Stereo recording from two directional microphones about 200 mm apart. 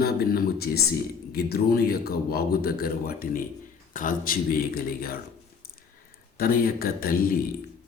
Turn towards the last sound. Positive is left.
turn(degrees=45)  # may be behind; listen again after turning